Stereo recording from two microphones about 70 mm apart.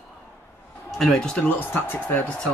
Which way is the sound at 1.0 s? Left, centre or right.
Centre.